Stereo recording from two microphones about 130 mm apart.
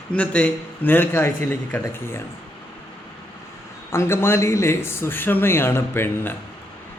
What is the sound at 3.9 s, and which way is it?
A man's voice, 20° left (ahead or behind).